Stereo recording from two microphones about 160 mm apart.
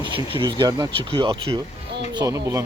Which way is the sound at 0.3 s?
30° right (ahead or behind).